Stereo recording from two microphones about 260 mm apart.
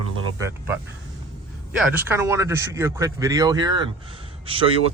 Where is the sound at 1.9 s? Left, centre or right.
Centre.